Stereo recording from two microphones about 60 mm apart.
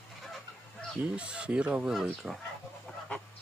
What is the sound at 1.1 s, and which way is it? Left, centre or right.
Speech, centre.